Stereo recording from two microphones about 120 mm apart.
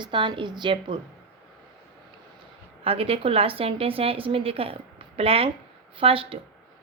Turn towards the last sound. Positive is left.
turn(degrees=-50)  # may be behind; listen again after turning